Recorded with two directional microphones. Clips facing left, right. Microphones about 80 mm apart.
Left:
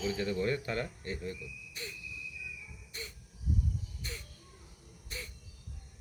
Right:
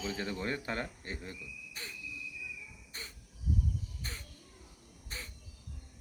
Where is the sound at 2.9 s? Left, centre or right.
Right.